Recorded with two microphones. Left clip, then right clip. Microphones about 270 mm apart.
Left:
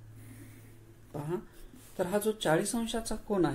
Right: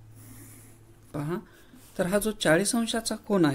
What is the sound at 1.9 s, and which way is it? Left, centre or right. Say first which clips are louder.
Speech: right 4 dB; right.